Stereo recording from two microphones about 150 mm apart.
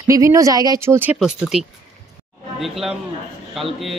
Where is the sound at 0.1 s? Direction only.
20° right (ahead or behind).